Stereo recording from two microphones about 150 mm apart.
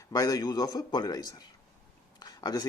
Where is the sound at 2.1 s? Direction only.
30° left (ahead or behind).